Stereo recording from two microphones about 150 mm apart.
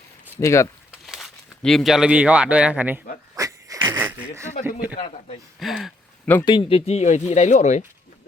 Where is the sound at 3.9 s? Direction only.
15° right (ahead or behind).